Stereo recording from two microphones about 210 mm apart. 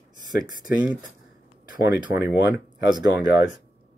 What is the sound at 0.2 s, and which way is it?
Speech, 20° right (ahead or behind).